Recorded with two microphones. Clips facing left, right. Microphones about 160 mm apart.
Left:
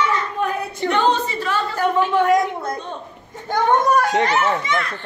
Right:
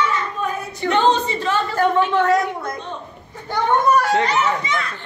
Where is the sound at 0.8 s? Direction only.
25° right (ahead or behind).